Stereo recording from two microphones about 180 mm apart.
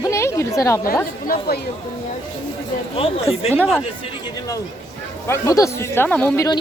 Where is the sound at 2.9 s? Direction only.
30° left (ahead or behind).